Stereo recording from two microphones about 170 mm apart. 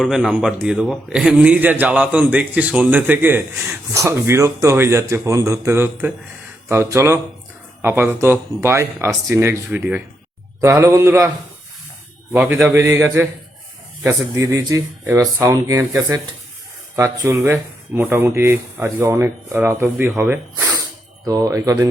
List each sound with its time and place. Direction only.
0.0 s a man's voice: centre (ahead or behind)
12.3 s a man's voice: 10° right (ahead or behind)